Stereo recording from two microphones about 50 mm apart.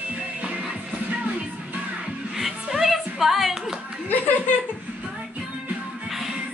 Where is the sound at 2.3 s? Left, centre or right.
Centre.